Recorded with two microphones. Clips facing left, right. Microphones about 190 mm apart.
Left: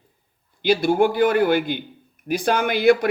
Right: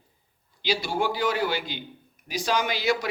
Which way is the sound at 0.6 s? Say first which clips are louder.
Left 9 dB; 55° left (ahead or behind).